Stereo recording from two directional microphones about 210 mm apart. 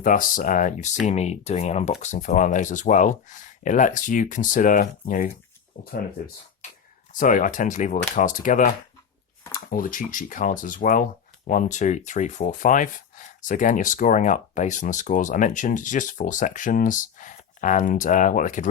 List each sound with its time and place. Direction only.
0.0 s speech: 40° left (ahead or behind)